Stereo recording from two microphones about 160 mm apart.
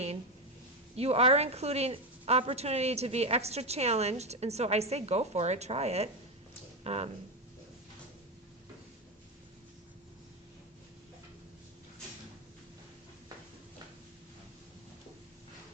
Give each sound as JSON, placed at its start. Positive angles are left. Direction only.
{"t": 0.9, "sound": "a woman's voice", "side_deg": -40}